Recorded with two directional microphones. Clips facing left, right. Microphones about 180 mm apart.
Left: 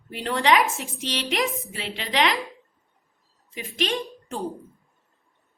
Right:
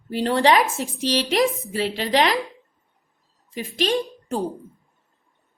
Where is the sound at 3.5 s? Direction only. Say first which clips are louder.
Right 5 dB; 35° right (ahead or behind).